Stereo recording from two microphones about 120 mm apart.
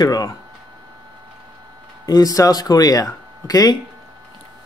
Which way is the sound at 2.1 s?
30° left (ahead or behind).